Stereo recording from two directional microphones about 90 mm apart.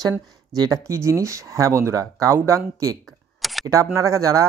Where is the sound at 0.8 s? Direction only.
35° right (ahead or behind).